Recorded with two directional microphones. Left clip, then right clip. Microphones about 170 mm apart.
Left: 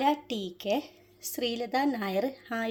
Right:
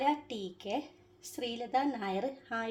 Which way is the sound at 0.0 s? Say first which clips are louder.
Left 4 dB; 40° left (ahead or behind).